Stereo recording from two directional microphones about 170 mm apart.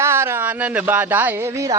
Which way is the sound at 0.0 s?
15° right (ahead or behind).